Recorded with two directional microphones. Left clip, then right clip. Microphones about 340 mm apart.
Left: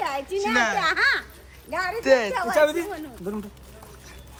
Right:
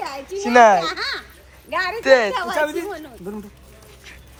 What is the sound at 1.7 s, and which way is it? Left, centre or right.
Speech, right.